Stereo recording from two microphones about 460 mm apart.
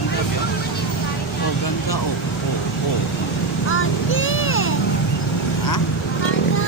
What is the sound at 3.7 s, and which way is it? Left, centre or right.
Vehicle, left.